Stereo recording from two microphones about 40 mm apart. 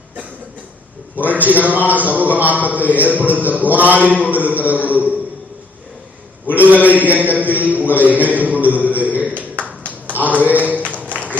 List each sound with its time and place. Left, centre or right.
1.1 s a man's voice: right
6.5 s a man's voice: right
8.4 s a sound: right